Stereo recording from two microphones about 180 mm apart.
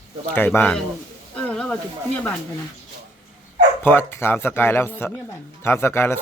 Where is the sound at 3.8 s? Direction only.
10° left (ahead or behind).